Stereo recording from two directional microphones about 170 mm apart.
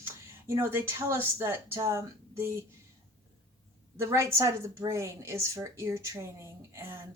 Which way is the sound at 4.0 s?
15° right (ahead or behind).